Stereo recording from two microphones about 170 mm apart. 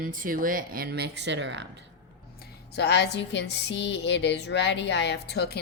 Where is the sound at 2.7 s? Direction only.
75° left (ahead or behind).